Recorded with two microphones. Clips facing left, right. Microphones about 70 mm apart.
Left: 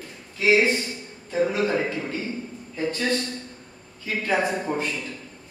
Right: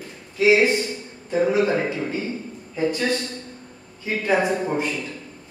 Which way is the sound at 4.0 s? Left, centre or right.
Centre.